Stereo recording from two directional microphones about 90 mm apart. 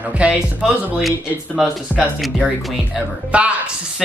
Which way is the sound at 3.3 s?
15° right (ahead or behind).